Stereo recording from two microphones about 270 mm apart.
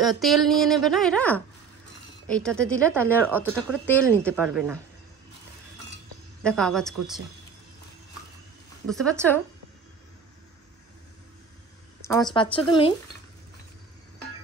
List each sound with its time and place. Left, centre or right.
0.0 s a woman's voice: centre
6.4 s a woman's voice: centre
8.8 s a woman's voice: centre
12.1 s a woman's voice: centre